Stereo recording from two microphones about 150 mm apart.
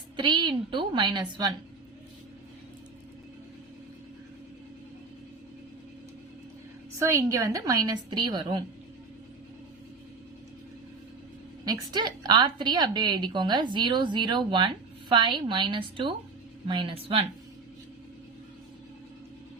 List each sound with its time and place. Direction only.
0.2 s a woman's voice: 30° right (ahead or behind)
7.0 s a woman's voice: 20° right (ahead or behind)
11.6 s a woman's voice: 25° right (ahead or behind)